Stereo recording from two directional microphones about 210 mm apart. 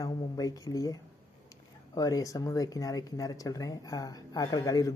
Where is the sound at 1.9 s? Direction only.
15° left (ahead or behind).